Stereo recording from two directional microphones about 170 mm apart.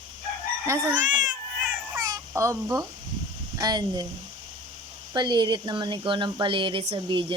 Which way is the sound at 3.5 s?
25° right (ahead or behind).